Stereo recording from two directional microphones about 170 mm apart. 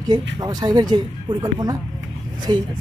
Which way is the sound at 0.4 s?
25° right (ahead or behind).